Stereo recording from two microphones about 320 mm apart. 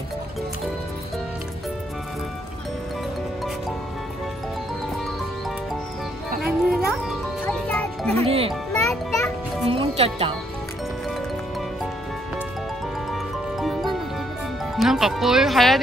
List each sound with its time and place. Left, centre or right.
6.4 s music: centre
8.3 s music: centre
8.8 s music: centre
9.7 s music: centre
13.1 s music: centre
14.8 s speech: centre